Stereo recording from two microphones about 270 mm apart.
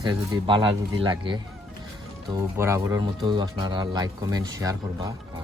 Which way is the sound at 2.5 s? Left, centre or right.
Centre.